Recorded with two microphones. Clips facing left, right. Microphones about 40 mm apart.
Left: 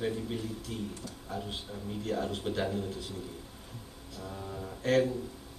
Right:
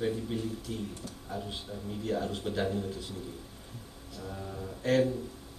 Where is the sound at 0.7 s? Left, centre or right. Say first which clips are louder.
Left 1 dB; centre.